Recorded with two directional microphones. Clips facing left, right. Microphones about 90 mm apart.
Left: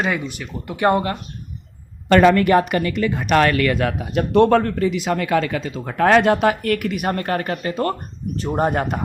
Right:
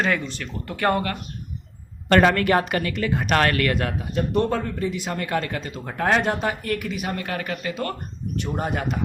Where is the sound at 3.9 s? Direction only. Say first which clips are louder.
Left 7 dB; 90° left; by 9.0 s 45° left (ahead or behind).